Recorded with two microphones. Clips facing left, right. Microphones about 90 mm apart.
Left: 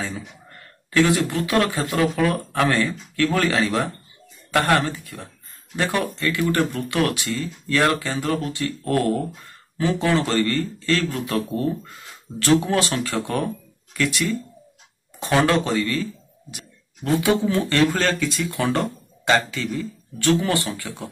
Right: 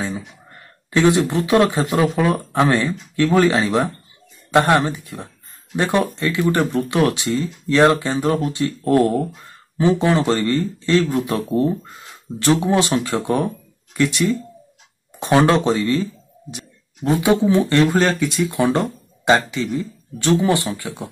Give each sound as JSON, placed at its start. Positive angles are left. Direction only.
{"t": 0.8, "sound": "speech", "side_deg": -20}